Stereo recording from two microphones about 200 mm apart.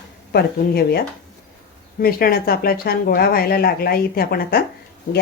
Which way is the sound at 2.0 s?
50° left (ahead or behind).